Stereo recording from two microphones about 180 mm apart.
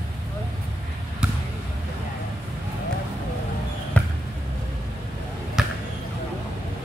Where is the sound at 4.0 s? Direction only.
10° left (ahead or behind).